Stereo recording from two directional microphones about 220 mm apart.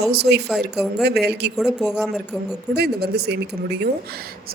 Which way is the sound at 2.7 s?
45° right (ahead or behind).